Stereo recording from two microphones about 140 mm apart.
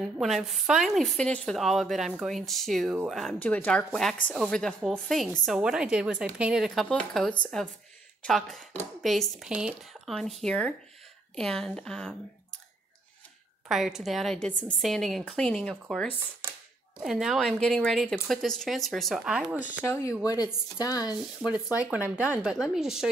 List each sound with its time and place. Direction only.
0.0 s a woman's voice: centre (ahead or behind)
13.7 s a woman's voice: 5° right (ahead or behind)
19.8 s speech: 20° left (ahead or behind)
21.5 s a woman's voice: 10° right (ahead or behind)